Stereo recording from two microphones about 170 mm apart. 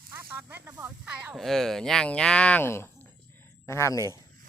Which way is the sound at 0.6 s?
15° right (ahead or behind).